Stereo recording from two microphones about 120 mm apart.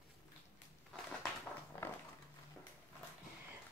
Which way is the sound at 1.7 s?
15° left (ahead or behind).